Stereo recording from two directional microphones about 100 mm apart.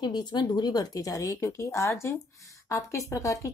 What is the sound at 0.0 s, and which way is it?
Speech, 45° left (ahead or behind).